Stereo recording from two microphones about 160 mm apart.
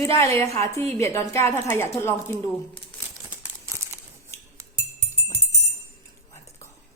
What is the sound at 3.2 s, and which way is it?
Crumpling, 15° right (ahead or behind).